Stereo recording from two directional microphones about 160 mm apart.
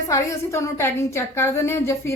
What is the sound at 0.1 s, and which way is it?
A woman's voice, 20° left (ahead or behind).